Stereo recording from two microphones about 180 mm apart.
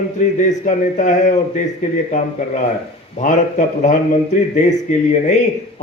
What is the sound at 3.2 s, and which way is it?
Speech, 45° left (ahead or behind).